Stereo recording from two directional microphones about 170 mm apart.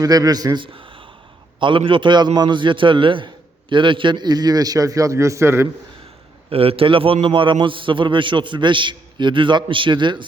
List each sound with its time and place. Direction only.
0.0 s a man's voice: 20° right (ahead or behind)
6.5 s a man's voice: 35° right (ahead or behind)